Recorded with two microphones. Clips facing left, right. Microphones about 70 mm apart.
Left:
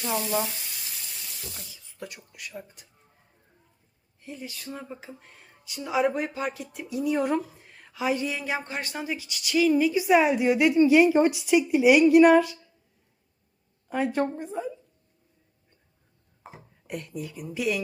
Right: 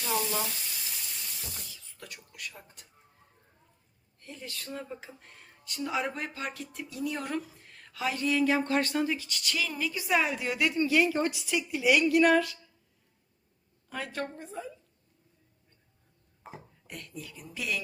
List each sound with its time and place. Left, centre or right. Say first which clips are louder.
0.0 s water tap: left 4 dB; centre
1.6 s a sound: left 7 dB; centre
2.3 s speech: left 4 dB; centre
4.2 s speech: left 4 dB; centre
13.9 s a woman's voice: left 10 dB; centre
16.4 s a sound: even; centre
16.8 s speech: left 10 dB; centre